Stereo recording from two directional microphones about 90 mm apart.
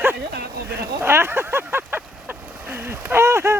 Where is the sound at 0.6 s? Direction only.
25° right (ahead or behind).